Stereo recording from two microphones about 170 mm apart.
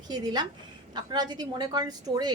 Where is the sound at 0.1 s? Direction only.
25° right (ahead or behind).